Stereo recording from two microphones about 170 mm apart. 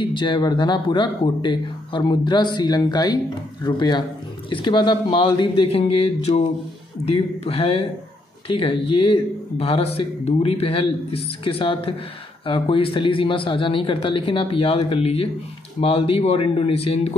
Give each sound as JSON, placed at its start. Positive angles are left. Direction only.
{"t": 0.0, "sound": "speech", "side_deg": 30}